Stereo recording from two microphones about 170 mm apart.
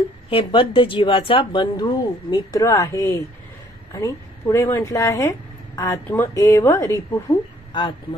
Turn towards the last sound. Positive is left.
turn(degrees=20)  # may be behind; listen again after turning